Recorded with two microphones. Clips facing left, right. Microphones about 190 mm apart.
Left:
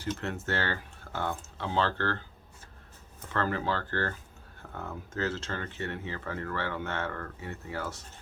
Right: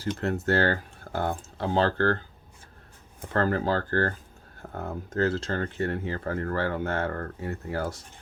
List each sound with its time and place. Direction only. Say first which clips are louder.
0.2 s speech: right 8 dB; 35° right (ahead or behind)
3.2 s speech: right 5 dB; 40° right (ahead or behind)